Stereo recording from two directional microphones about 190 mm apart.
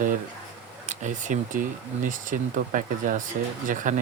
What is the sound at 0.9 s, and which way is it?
Speech, 40° right (ahead or behind).